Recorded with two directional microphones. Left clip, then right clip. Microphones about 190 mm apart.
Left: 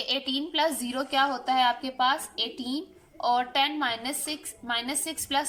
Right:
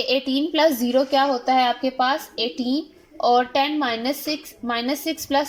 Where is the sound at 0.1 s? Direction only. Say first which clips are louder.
Right 5 dB; 45° right (ahead or behind).